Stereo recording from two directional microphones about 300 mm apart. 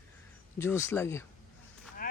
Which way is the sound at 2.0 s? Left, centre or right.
Left.